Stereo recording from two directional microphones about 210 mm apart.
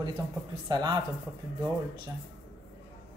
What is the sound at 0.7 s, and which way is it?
Speech, 20° right (ahead or behind).